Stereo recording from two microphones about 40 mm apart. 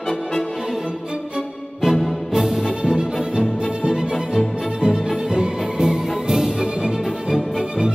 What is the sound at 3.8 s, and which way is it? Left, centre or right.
Music, right.